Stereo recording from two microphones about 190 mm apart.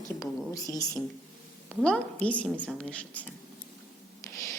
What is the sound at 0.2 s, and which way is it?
Speech, 20° left (ahead or behind).